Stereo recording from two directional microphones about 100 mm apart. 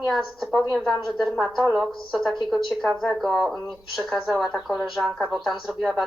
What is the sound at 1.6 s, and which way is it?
Speech, 10° right (ahead or behind).